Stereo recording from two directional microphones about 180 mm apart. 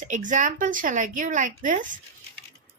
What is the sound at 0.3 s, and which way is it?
A woman's voice, 45° right (ahead or behind).